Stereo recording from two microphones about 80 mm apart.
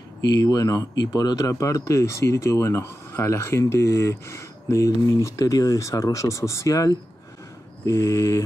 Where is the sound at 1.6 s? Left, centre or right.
Left.